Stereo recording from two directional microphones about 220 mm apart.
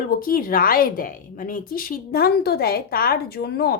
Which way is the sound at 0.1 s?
40° left (ahead or behind).